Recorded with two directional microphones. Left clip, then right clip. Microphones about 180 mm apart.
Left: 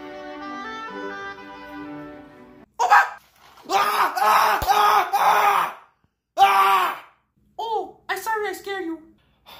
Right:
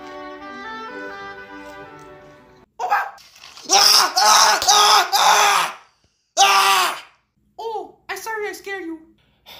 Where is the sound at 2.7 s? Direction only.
35° right (ahead or behind).